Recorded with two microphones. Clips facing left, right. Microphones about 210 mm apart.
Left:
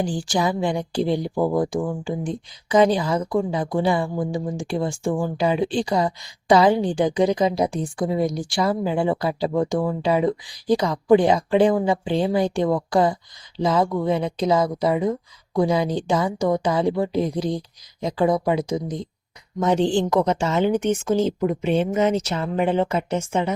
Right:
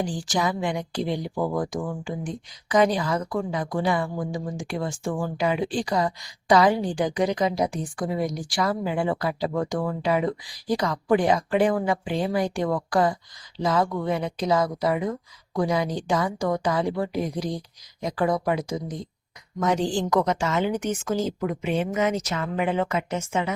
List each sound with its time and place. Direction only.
0.0 s speech: 30° left (ahead or behind)